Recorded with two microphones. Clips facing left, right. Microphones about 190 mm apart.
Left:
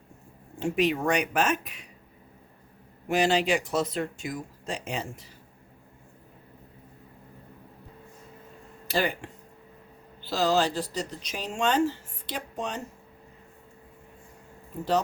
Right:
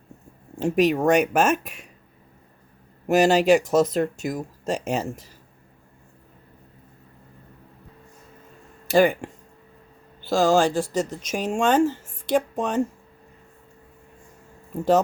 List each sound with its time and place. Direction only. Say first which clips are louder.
0.6 s speech: right 6 dB; 40° right (ahead or behind)
3.1 s speech: right 7 dB; 45° right (ahead or behind)
8.9 s speech: right 10 dB; 50° right (ahead or behind)